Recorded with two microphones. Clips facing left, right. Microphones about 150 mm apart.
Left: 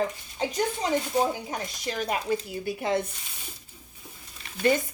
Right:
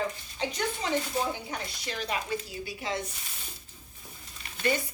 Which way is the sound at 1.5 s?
45° left (ahead or behind).